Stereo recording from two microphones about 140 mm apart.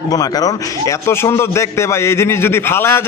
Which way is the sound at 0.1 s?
25° left (ahead or behind).